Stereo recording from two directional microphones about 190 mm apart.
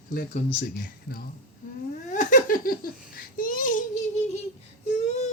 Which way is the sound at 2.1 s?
40° left (ahead or behind).